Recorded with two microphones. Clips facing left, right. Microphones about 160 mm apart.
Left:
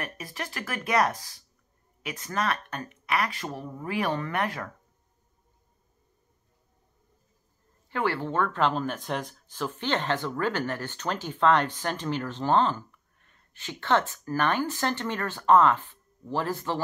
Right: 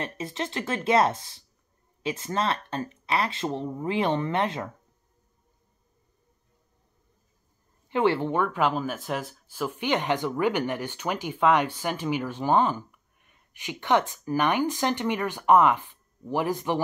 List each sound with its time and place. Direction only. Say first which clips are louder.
0.0 s speech: right 5 dB; 25° right (ahead or behind)
7.9 s speech: right 5 dB; 20° right (ahead or behind)